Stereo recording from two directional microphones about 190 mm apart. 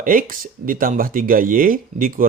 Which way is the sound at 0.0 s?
45° right (ahead or behind).